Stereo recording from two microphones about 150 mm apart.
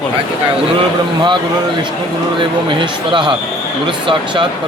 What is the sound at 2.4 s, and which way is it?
Speech, 35° right (ahead or behind).